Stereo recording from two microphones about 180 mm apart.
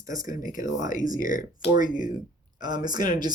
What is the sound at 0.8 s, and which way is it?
Speech, 45° left (ahead or behind).